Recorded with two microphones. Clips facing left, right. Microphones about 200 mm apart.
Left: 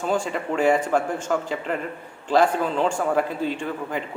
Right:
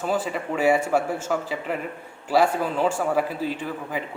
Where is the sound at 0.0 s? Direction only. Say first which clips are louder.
Left 1 dB; 5° right (ahead or behind).